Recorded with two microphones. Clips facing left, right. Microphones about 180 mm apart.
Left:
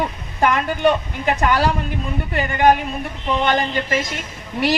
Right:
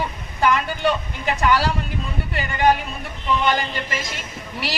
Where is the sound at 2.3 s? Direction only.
50° left (ahead or behind).